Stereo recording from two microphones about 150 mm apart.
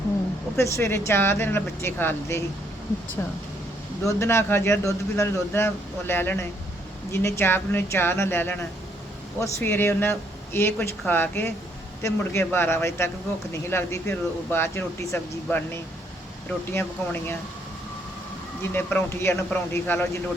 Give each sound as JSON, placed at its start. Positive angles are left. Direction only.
{"t": 0.5, "sound": "a man's voice", "side_deg": 20}
{"t": 18.7, "sound": "a man's voice", "side_deg": 10}